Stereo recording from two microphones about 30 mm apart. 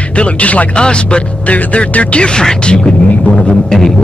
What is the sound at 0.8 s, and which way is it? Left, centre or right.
Speech, left.